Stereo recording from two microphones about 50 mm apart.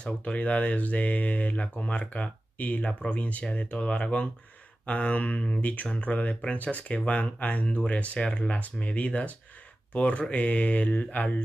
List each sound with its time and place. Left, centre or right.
0.0 s speech: left